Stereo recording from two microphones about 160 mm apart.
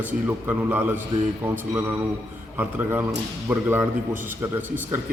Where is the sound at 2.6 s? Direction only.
15° right (ahead or behind).